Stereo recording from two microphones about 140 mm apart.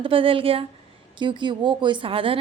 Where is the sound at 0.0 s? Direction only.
40° right (ahead or behind).